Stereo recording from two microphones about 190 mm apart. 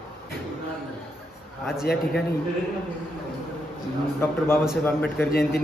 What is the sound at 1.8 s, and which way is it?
Speech, 55° left (ahead or behind).